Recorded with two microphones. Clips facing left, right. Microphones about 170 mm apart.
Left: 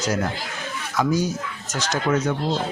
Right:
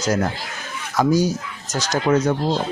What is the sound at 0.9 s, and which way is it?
Speech, 40° right (ahead or behind).